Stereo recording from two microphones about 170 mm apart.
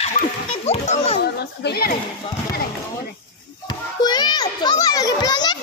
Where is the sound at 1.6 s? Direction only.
65° left (ahead or behind).